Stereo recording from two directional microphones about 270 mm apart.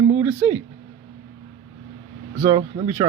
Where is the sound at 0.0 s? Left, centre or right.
Centre.